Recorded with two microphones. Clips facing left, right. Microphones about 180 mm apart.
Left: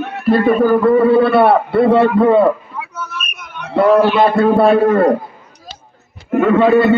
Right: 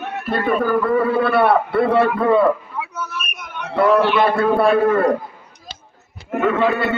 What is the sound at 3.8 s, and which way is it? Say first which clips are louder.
A man's voice: left 4 dB; 30° left (ahead or behind).